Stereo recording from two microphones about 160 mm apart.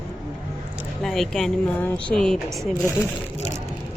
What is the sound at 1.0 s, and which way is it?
Speech, centre (ahead or behind).